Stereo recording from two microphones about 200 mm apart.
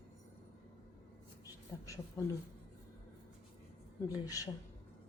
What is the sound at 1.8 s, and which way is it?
Speech, 15° left (ahead or behind).